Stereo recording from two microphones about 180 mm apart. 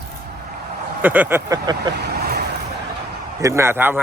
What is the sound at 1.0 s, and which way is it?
Speech, 10° right (ahead or behind).